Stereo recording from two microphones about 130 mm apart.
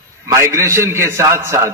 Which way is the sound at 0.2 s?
20° right (ahead or behind).